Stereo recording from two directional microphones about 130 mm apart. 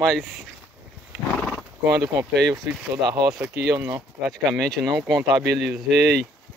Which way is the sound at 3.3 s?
30° right (ahead or behind).